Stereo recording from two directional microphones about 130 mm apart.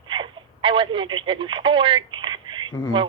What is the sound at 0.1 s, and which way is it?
Telephone, 40° right (ahead or behind).